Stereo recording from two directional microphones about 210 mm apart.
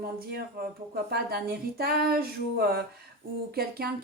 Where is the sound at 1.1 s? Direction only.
45° right (ahead or behind).